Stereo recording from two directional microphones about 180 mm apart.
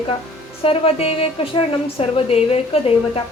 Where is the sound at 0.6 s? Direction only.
30° left (ahead or behind).